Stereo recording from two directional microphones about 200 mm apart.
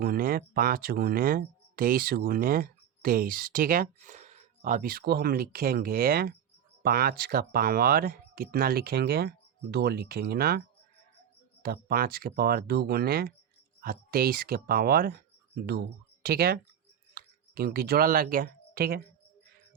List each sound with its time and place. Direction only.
0.0 s speech: 45° right (ahead or behind)
11.6 s speech: 50° right (ahead or behind)